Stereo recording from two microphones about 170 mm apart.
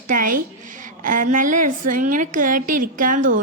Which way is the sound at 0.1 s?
55° right (ahead or behind).